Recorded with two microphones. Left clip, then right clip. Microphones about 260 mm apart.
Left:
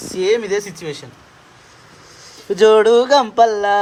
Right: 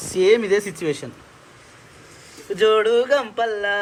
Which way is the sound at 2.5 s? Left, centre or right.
Left.